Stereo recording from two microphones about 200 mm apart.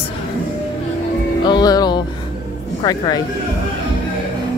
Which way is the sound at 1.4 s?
20° left (ahead or behind).